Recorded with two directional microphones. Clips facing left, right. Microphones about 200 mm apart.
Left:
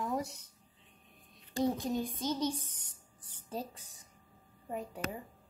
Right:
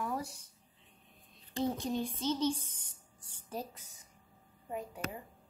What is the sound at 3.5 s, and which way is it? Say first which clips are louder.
Speech: left 1 dB; 30° left (ahead or behind).